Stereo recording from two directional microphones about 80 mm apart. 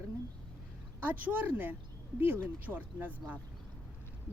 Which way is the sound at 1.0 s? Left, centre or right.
Right.